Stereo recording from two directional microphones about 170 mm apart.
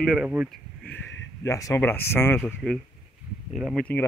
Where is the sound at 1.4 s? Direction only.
20° left (ahead or behind).